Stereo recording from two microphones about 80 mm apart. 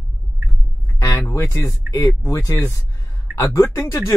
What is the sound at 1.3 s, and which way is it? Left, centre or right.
Speech, left.